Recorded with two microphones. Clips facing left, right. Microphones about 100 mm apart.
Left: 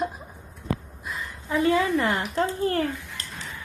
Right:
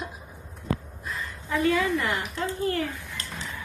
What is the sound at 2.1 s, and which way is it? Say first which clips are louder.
Speech: left 5 dB; 40° left (ahead or behind).